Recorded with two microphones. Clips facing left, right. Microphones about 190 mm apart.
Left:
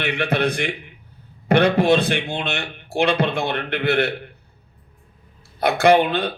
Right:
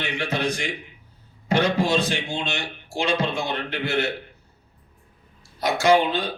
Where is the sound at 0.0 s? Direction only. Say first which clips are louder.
Left 5 dB; 60° left (ahead or behind).